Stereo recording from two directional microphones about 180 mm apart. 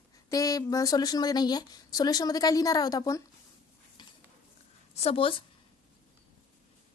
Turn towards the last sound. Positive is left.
turn(degrees=30)  # may be behind; listen again after turning